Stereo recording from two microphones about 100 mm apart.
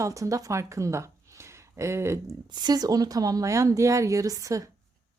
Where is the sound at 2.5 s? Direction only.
45° right (ahead or behind).